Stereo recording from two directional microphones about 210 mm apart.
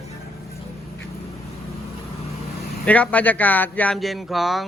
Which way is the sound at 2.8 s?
5° left (ahead or behind).